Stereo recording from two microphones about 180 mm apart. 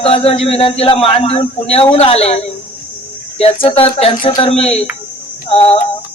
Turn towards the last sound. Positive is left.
turn(degrees=35)  # may be behind; listen again after turning